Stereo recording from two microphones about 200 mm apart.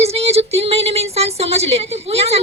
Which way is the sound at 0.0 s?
30° right (ahead or behind).